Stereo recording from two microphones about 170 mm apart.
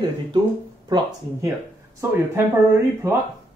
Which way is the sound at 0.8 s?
25° right (ahead or behind).